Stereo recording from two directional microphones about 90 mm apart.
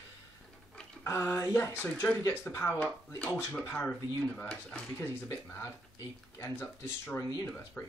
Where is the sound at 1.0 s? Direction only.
25° left (ahead or behind).